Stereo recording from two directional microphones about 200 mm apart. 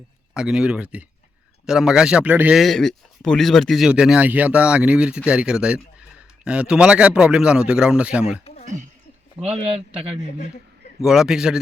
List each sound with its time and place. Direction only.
0.3 s speech: 5° right (ahead or behind)
8.6 s speech: 40° right (ahead or behind)
11.0 s speech: centre (ahead or behind)